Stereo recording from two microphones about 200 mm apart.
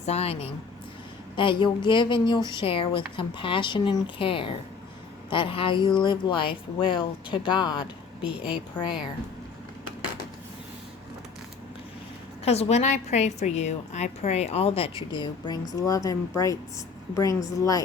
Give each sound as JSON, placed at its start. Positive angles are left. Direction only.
{"t": 0.0, "sound": "a woman's voice", "side_deg": 30}
{"t": 1.4, "sound": "speech", "side_deg": 25}
{"t": 8.8, "sound": "speech", "side_deg": 10}
{"t": 12.5, "sound": "a woman's voice", "side_deg": 30}